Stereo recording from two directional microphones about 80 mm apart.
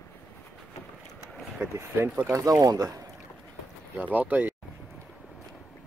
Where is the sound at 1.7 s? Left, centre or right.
Right.